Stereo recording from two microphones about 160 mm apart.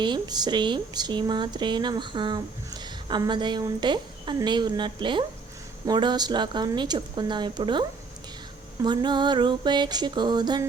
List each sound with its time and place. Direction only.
0.0 s speech: 25° right (ahead or behind)